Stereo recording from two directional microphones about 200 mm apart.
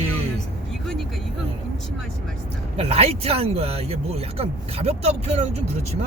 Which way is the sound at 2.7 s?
30° right (ahead or behind).